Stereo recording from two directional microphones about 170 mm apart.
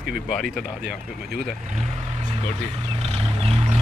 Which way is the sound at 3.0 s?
35° right (ahead or behind).